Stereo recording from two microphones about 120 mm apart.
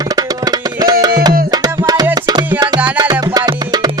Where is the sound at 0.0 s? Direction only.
30° right (ahead or behind).